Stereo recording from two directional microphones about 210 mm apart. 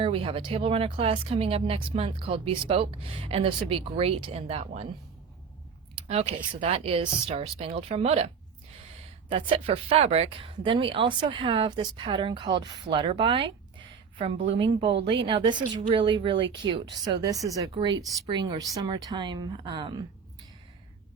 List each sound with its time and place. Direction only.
0.0 s speech: 25° right (ahead or behind)
6.1 s speech: 30° right (ahead or behind)
9.3 s a woman's voice: 25° right (ahead or behind)